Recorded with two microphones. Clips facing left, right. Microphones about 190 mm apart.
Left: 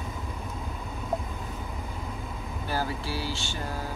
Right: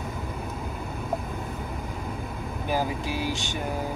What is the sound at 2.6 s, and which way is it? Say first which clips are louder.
Speech: right 4 dB; 15° right (ahead or behind).